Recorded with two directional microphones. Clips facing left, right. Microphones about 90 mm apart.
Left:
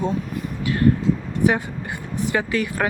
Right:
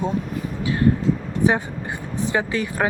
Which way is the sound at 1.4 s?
30° right (ahead or behind).